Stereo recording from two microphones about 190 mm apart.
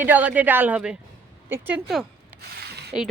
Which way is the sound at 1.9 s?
Centre (ahead or behind).